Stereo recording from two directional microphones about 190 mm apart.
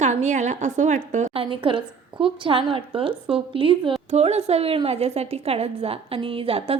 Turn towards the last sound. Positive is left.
turn(degrees=-30)  # may be behind; listen again after turning